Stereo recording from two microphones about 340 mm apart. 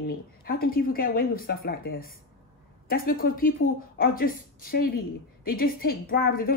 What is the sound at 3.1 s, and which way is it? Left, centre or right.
Speech, left.